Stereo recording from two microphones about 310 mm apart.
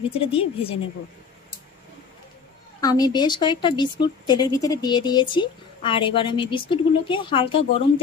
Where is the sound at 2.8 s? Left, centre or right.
Centre.